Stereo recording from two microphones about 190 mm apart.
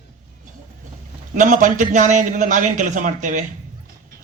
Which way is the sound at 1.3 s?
40° right (ahead or behind).